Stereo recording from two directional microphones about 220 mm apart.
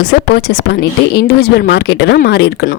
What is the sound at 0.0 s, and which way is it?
Speech, 50° left (ahead or behind).